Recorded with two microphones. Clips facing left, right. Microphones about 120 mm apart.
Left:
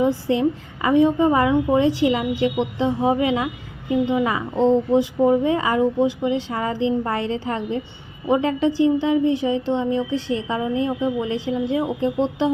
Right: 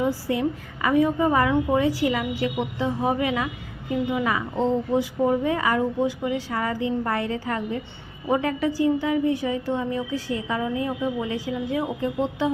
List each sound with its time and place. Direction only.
0.3 s a woman's voice: 25° left (ahead or behind)